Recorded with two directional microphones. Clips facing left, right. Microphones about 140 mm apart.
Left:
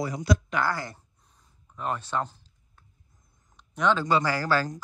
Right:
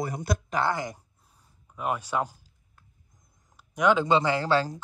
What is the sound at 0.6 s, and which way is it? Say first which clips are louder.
Speech: right 1 dB; 20° right (ahead or behind).